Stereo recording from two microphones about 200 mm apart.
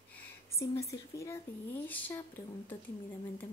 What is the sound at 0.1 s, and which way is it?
A woman's voice, 15° left (ahead or behind).